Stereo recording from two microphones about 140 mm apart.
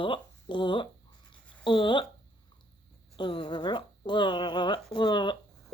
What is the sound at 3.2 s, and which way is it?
A woman's voice, 35° left (ahead or behind).